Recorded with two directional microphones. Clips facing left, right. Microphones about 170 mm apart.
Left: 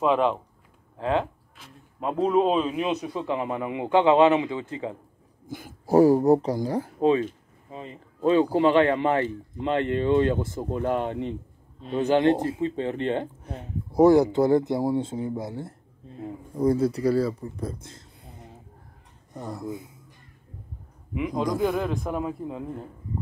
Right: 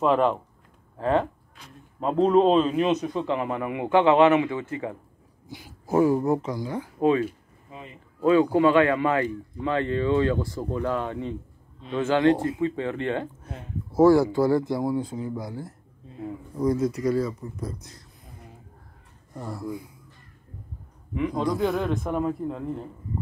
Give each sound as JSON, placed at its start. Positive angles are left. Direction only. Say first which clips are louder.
{"t": 0.0, "sound": "a man's voice", "louder": "right 1 dB", "side_deg": 5}
{"t": 5.5, "sound": "speech", "louder": "left 5 dB", "side_deg": 50}
{"t": 5.9, "sound": "speech", "louder": "left 4 dB", "side_deg": 35}
{"t": 7.0, "sound": "speech", "louder": "right 1 dB", "side_deg": 25}
{"t": 19.3, "sound": "speech", "louder": "even", "side_deg": 20}
{"t": 21.1, "sound": "a man's voice", "louder": "right 1 dB", "side_deg": 10}